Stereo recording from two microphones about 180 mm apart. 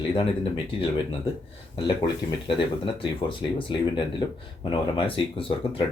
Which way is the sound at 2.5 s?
30° left (ahead or behind).